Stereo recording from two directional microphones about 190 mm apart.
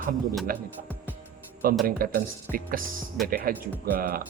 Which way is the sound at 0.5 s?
50° right (ahead or behind).